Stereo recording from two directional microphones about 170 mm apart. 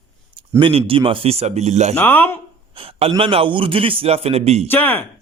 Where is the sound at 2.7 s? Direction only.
35° right (ahead or behind).